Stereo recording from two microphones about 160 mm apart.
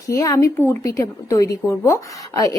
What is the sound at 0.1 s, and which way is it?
Speech, 20° left (ahead or behind).